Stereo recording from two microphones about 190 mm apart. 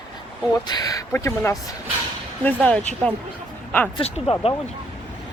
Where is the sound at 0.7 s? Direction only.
20° left (ahead or behind).